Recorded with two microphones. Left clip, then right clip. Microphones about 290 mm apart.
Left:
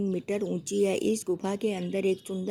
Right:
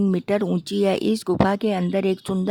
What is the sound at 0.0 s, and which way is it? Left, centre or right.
Speech, right.